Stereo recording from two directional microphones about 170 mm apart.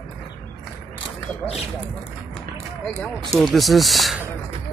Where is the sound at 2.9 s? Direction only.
5° left (ahead or behind).